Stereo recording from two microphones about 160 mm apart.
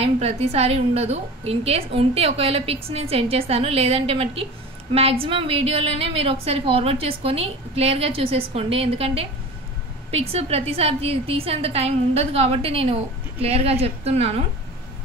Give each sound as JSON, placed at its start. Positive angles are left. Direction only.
{"t": 0.0, "sound": "a woman's voice", "side_deg": -40}